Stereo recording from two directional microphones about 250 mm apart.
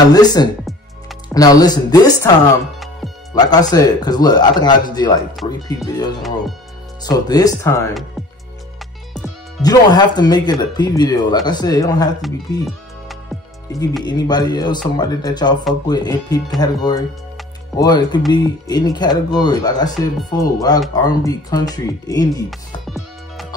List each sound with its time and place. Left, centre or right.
0.1 s speech: centre
9.6 s speech: centre
14.0 s speech: centre
22.8 s music: centre